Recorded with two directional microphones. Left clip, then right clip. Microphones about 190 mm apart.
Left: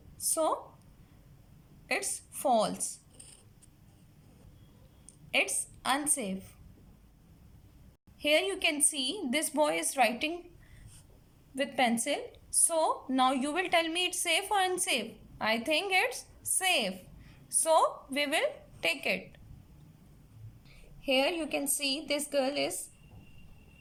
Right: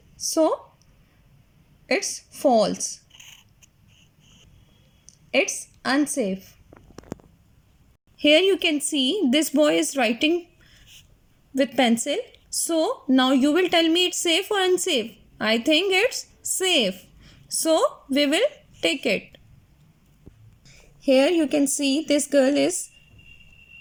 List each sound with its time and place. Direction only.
0.3 s speech: 35° right (ahead or behind)
2.3 s speech: 35° right (ahead or behind)
5.8 s speech: 35° right (ahead or behind)
8.2 s speech: 35° right (ahead or behind)
11.5 s speech: 35° right (ahead or behind)
21.0 s a woman's voice: 40° right (ahead or behind)